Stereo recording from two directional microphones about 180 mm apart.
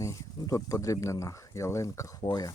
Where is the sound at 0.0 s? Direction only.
15° left (ahead or behind).